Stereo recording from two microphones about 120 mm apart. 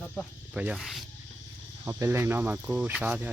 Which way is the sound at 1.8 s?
20° right (ahead or behind).